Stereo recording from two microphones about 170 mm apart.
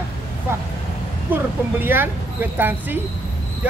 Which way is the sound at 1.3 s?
10° right (ahead or behind).